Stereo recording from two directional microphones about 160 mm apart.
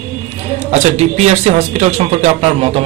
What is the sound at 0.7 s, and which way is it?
Speech, 45° right (ahead or behind).